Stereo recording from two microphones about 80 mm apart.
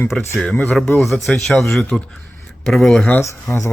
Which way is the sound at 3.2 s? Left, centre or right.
Left.